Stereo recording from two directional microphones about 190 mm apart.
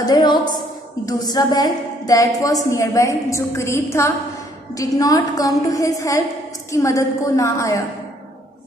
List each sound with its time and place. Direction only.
0.0 s a woman's voice: 25° left (ahead or behind)